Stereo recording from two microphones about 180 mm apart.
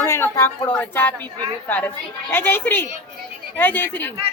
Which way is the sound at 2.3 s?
10° left (ahead or behind).